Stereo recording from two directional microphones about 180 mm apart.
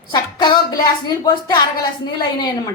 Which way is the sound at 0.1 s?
25° left (ahead or behind).